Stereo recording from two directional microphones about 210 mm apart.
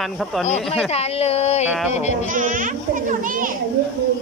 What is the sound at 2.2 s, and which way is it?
A child's voice, 40° right (ahead or behind).